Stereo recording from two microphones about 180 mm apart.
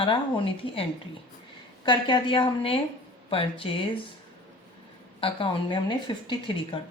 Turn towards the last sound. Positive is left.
turn(degrees=25)  # may be behind; listen again after turning